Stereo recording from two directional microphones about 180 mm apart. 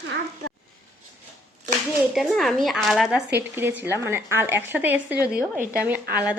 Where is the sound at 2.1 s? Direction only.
Centre (ahead or behind).